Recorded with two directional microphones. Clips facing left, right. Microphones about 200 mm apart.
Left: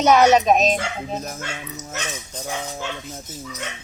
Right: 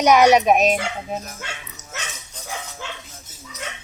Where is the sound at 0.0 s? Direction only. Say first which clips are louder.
Right 1 dB; 15° right (ahead or behind).